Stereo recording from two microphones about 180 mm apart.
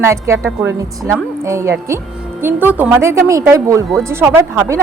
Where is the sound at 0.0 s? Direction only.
15° right (ahead or behind).